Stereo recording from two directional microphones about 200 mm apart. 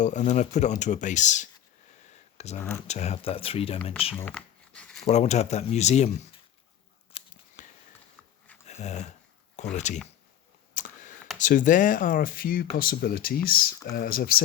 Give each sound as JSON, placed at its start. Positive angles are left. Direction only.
{"t": 0.0, "sound": "speech", "side_deg": 35}
{"t": 4.2, "sound": "a sound", "side_deg": 5}
{"t": 5.0, "sound": "speech", "side_deg": 35}
{"t": 7.1, "sound": "a sound", "side_deg": 40}
{"t": 8.2, "sound": "dog", "side_deg": 5}
{"t": 8.6, "sound": "dog", "side_deg": 35}
{"t": 9.7, "sound": "speech", "side_deg": 35}
{"t": 10.8, "sound": "computer keyboard", "side_deg": 40}
{"t": 11.3, "sound": "speech", "side_deg": 40}